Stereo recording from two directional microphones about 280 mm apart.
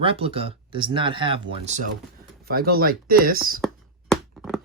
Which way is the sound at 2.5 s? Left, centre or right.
Right.